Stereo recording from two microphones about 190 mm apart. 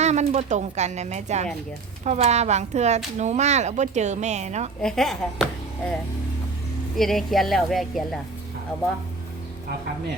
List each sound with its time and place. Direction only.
0.0 s speech: 35° right (ahead or behind)
4.8 s speech: 5° left (ahead or behind)
6.9 s speech: centre (ahead or behind)